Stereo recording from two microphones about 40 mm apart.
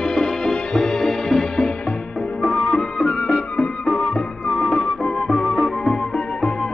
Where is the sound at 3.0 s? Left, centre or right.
Centre.